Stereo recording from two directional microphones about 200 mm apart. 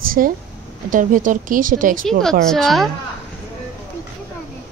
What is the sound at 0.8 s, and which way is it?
Speech, 40° right (ahead or behind).